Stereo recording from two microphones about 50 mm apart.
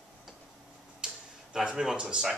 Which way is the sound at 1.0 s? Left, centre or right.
Centre.